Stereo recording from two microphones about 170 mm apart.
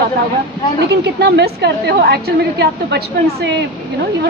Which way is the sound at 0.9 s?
80° right.